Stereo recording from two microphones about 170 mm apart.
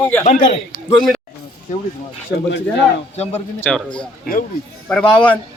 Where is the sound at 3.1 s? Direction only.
40° left (ahead or behind).